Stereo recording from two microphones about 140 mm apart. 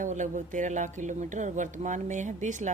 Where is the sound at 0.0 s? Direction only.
65° right (ahead or behind).